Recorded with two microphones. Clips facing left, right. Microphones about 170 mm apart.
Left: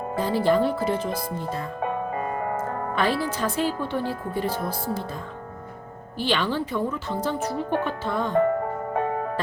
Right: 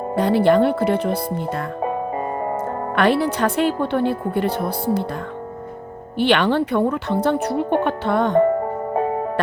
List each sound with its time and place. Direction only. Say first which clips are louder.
0.2 s speech: right 6 dB; 65° right (ahead or behind)
1.8 s music: right 3 dB; 30° right (ahead or behind)
2.9 s speech: right 8 dB; 65° right (ahead or behind)
6.1 s speech: right 8 dB; 65° right (ahead or behind)
8.4 s music: right 5 dB; 30° right (ahead or behind)